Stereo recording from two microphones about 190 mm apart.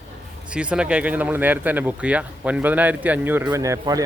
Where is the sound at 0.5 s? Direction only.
5° right (ahead or behind).